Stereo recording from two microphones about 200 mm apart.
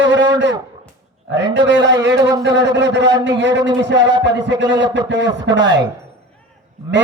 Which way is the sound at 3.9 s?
20° right (ahead or behind).